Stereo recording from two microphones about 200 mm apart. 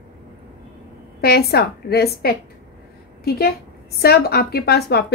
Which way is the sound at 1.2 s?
50° left (ahead or behind).